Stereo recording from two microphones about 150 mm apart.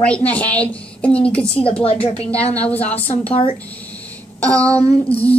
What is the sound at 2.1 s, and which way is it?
A woman's voice, 10° left (ahead or behind).